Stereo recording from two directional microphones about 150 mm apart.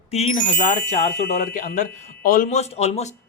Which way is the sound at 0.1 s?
45° left (ahead or behind).